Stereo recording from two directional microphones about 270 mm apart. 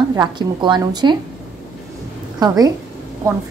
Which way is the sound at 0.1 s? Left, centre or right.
Centre.